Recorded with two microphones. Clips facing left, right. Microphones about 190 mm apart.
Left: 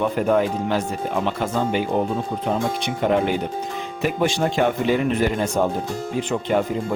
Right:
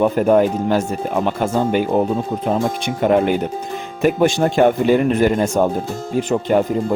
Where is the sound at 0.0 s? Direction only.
45° right (ahead or behind).